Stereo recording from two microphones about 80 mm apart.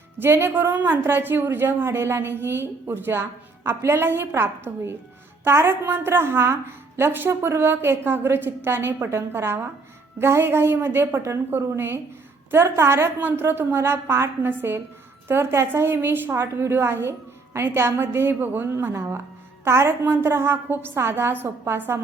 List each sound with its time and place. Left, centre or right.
0.2 s a woman's voice: right